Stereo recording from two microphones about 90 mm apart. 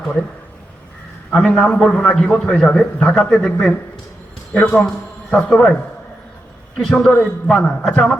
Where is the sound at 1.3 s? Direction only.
10° left (ahead or behind).